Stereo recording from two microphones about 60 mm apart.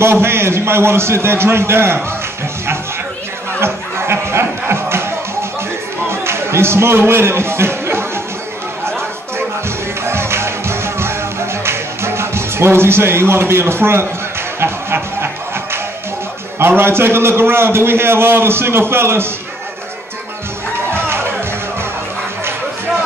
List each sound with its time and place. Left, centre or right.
0.0 s a man's voice: right
3.5 s a sound: right
6.0 s a sound: right
10.0 s music: right
16.5 s a man's voice: right
20.9 s music: right